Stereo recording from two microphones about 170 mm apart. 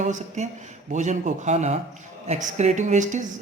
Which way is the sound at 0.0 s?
45° right (ahead or behind).